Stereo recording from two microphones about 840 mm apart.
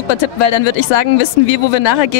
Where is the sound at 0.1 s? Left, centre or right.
Left.